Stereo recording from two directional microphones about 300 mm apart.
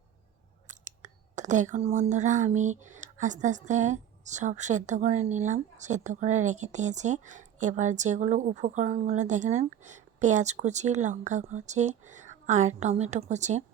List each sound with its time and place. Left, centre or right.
0.7 s speech: right